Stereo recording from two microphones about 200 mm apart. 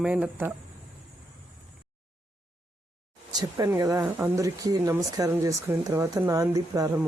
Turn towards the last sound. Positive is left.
turn(degrees=-15)  # may be behind; listen again after turning